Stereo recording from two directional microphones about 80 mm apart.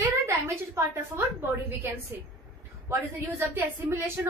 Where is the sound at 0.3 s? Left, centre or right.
Right.